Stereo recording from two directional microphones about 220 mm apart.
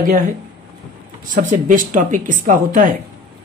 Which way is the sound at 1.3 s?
35° right (ahead or behind).